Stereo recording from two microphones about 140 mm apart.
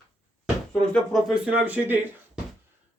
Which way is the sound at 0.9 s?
Centre (ahead or behind).